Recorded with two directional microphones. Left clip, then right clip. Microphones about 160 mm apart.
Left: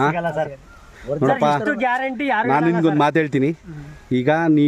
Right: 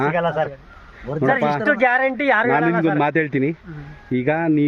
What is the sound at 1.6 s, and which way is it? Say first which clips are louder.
Speech: right 4 dB; 35° right (ahead or behind).